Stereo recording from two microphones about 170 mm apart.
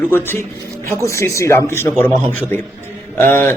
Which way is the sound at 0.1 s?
15° left (ahead or behind).